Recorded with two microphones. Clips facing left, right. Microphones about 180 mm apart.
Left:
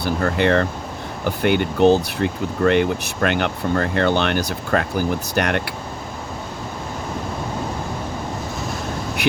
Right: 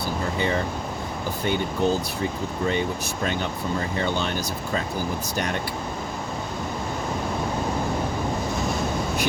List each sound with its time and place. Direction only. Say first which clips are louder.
0.0 s speech: left 6 dB; 70° left (ahead or behind)